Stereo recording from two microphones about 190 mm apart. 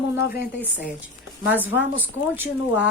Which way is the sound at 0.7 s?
10° right (ahead or behind).